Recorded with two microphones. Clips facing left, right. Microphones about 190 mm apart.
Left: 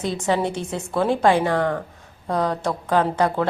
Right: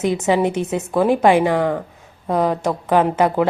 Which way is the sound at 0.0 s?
20° right (ahead or behind).